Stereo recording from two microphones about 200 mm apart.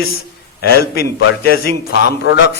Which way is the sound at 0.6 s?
50° left (ahead or behind).